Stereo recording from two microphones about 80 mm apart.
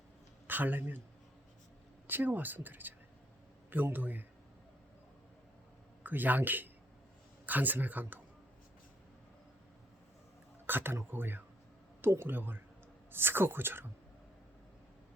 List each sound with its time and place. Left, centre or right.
0.4 s speech: right
2.0 s speech: right
6.0 s speech: right
10.7 s speech: right